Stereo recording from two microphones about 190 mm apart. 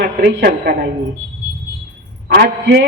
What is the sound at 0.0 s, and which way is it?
Speech, 60° right (ahead or behind).